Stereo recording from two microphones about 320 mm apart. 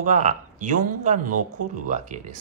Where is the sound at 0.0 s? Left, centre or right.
Right.